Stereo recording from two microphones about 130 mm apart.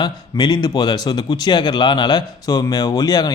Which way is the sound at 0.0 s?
35° left (ahead or behind).